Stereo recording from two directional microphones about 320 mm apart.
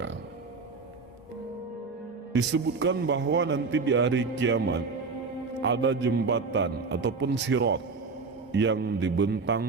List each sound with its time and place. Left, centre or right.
2.3 s a man's voice: right